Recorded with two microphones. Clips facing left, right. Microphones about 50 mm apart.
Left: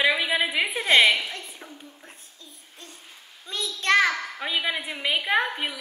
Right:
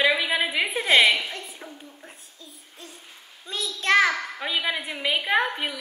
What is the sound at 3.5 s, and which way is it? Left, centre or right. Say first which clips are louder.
Child singing: right 1 dB; centre.